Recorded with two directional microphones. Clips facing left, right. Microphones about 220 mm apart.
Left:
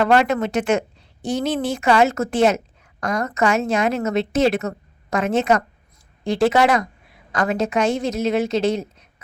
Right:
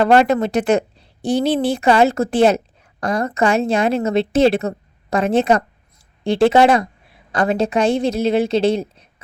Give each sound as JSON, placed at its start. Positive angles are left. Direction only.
{"t": 0.0, "sound": "a woman's voice", "side_deg": -30}